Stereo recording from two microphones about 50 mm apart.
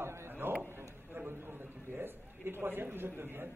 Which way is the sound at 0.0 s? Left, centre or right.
Right.